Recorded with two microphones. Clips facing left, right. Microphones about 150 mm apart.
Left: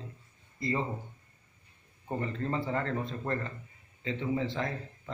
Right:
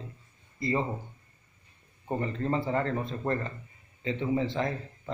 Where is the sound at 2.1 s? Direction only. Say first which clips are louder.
Right 3 dB; 20° right (ahead or behind).